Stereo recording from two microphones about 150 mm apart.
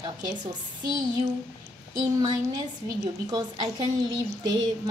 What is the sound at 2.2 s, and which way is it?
A woman's voice, 25° right (ahead or behind).